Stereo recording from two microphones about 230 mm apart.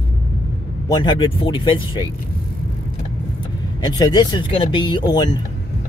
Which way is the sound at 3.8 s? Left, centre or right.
Centre.